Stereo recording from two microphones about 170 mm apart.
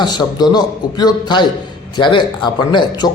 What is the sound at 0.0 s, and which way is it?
Speech, 25° left (ahead or behind).